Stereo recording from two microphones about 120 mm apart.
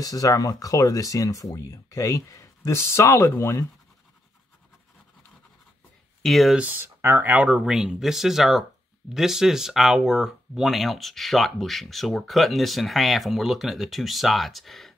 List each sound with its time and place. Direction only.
0.0 s speech: 30° left (ahead or behind)
6.2 s speech: centre (ahead or behind)
6.6 s speech: 15° right (ahead or behind); by 15.0 s centre (ahead or behind)